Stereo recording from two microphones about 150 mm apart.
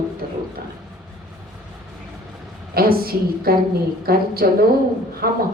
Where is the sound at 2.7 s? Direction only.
85° right.